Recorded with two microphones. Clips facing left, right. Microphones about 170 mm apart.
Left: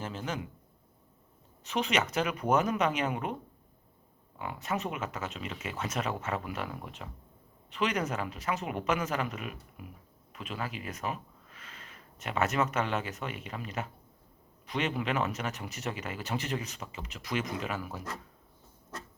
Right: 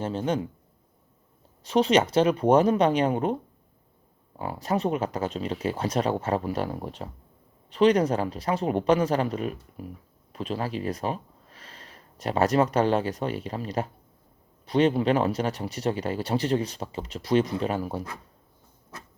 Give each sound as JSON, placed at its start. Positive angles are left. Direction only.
{"t": 0.0, "sound": "speech", "side_deg": -30}
{"t": 1.6, "sound": "speech", "side_deg": -35}
{"t": 4.4, "sound": "speech", "side_deg": -35}